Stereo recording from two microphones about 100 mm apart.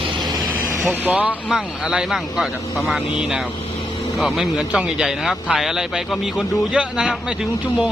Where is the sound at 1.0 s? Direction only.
15° right (ahead or behind).